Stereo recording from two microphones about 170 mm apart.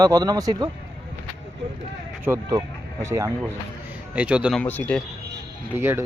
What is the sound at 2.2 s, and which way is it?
Speech, 15° right (ahead or behind).